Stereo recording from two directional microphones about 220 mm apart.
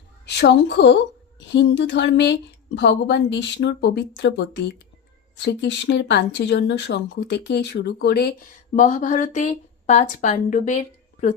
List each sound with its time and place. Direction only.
0.3 s a woman's voice: 50° left (ahead or behind)
8.7 s speech: 35° left (ahead or behind)